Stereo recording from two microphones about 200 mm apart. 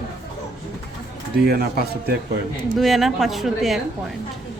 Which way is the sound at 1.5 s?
50° right (ahead or behind).